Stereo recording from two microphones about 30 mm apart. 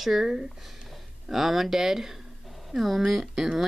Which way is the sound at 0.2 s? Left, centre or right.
Centre.